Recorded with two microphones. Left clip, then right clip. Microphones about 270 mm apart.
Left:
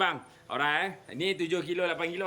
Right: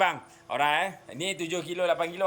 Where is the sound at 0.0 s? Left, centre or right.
Centre.